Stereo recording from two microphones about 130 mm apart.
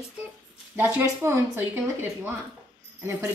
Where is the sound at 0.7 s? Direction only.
15° right (ahead or behind).